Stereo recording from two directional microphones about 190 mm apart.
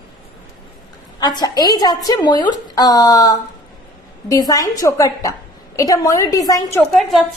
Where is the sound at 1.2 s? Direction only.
20° left (ahead or behind).